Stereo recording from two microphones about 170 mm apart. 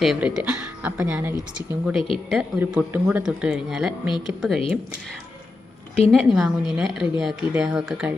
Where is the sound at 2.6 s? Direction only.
10° right (ahead or behind).